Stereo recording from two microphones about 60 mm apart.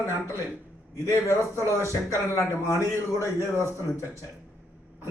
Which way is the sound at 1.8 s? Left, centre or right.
Left.